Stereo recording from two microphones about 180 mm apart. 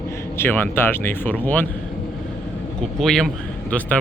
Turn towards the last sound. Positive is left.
turn(degrees=10)  # may be behind; listen again after turning